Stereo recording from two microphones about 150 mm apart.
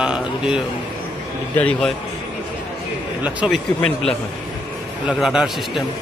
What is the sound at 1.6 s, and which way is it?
Speech, 10° left (ahead or behind).